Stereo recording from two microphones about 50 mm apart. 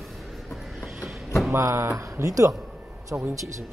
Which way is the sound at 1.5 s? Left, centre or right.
Right.